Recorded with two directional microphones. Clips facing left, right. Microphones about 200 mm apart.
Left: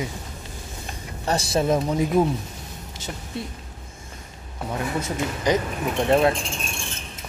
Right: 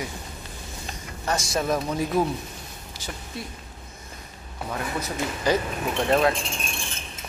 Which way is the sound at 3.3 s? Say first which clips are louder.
Left 5 dB; 25° left (ahead or behind).